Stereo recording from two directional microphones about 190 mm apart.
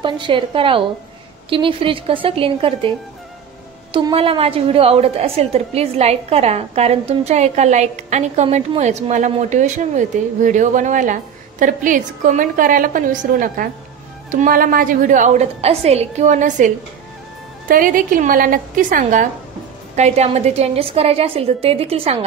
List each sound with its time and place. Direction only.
0.0 s a woman's voice: 25° right (ahead or behind)
3.9 s a woman's voice: 30° right (ahead or behind)